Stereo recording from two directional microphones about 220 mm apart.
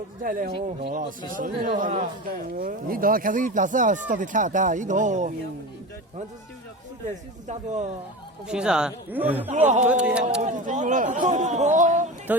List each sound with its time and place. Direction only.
0.2 s speech: 40° right (ahead or behind)
0.5 s speech: 25° right (ahead or behind)
1.4 s speech: 40° right (ahead or behind)
7.4 s speech: 30° right (ahead or behind)
8.4 s speech: 5° right (ahead or behind)
9.5 s speech: 30° right (ahead or behind)
10.0 s speech: 5° right (ahead or behind)
10.4 s speech: 35° right (ahead or behind)
12.3 s speech: 5° right (ahead or behind)